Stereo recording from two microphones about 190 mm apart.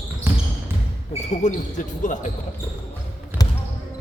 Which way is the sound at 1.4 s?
40° left (ahead or behind).